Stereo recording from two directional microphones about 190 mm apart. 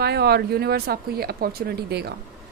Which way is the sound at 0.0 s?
55° right (ahead or behind).